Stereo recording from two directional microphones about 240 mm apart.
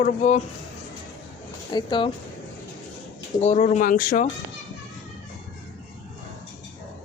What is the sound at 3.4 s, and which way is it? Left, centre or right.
Speech, left.